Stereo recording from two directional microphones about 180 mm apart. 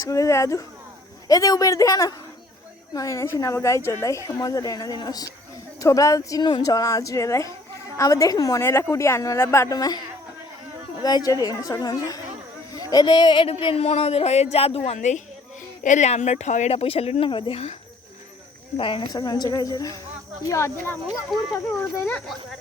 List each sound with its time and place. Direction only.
0.0 s a woman's voice: 20° left (ahead or behind)
11.0 s a woman's voice: 20° left (ahead or behind)
18.8 s a woman's voice: 30° left (ahead or behind); by 22.2 s 10° left (ahead or behind)